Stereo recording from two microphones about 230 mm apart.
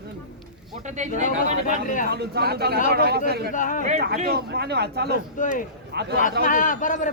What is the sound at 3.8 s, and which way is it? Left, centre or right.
Speech, right.